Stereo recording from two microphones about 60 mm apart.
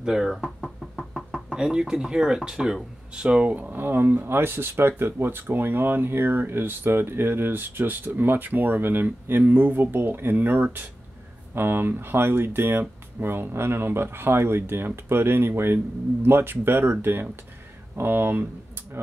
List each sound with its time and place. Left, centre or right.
0.0 s speech: centre; by 18.4 s right